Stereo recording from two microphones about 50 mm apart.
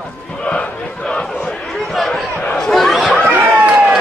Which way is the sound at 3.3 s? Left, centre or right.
Right.